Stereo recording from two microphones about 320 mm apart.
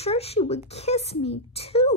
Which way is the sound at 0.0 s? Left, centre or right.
Centre.